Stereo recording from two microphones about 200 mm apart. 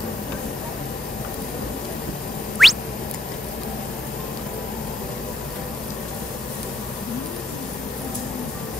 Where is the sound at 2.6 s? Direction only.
Centre (ahead or behind).